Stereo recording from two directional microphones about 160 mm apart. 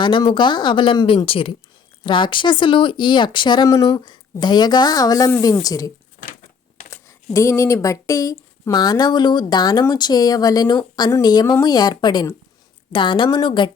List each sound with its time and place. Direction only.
0.0 s speech: 30° left (ahead or behind)
6.9 s speech: 20° left (ahead or behind)